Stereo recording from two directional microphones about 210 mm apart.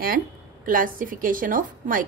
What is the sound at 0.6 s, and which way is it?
A woman's voice, 40° right (ahead or behind).